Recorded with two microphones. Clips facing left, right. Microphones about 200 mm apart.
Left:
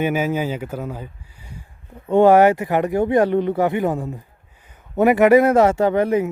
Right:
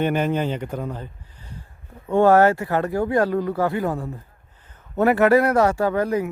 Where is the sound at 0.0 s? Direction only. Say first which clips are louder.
Left 1 dB; 5° left (ahead or behind).